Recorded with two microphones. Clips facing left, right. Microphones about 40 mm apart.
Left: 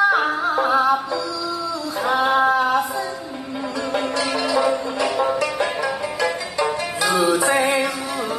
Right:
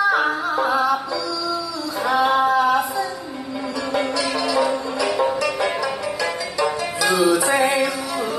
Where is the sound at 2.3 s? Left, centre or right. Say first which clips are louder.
Even; left.